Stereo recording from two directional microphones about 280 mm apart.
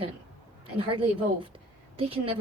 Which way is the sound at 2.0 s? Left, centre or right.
Centre.